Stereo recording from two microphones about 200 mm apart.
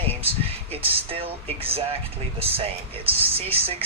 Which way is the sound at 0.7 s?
30° right (ahead or behind).